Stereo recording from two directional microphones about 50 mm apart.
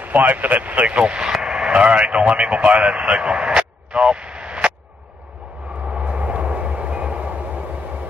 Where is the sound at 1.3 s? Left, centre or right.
Centre.